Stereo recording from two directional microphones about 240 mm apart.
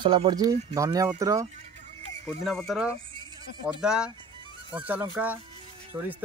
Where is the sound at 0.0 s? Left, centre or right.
Right.